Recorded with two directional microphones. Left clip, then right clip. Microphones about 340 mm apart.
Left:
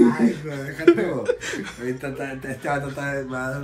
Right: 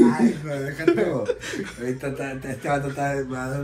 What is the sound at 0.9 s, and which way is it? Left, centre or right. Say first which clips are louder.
Speech: left 3 dB; left.